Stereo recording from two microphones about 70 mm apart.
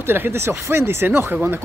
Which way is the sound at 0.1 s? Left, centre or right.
Right.